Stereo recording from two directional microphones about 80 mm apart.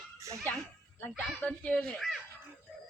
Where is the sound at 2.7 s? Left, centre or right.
Centre.